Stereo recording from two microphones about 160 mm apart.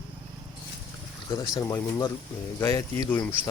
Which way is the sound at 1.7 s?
20° left (ahead or behind).